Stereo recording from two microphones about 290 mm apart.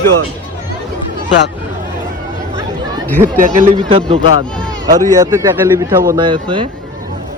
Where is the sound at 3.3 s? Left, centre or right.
Right.